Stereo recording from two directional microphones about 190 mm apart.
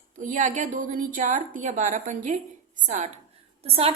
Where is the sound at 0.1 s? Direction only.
40° right (ahead or behind).